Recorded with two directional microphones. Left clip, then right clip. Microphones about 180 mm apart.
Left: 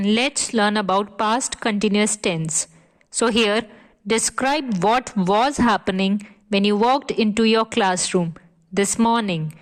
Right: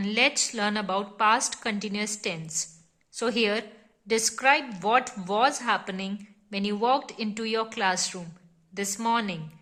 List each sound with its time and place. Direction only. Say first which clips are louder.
0.0 s a woman's voice: left 3 dB; 45° left (ahead or behind)